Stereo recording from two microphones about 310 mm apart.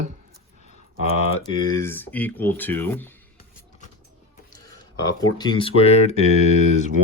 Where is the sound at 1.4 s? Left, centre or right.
Centre.